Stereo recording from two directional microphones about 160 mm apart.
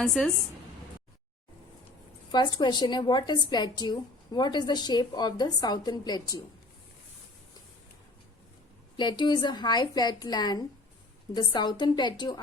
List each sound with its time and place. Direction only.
0.0 s a woman's voice: 5° left (ahead or behind)
2.6 s a woman's voice: 25° left (ahead or behind)
9.0 s a woman's voice: 30° left (ahead or behind)